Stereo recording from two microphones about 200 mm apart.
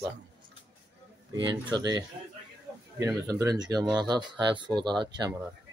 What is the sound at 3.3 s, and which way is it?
Speech, 20° right (ahead or behind).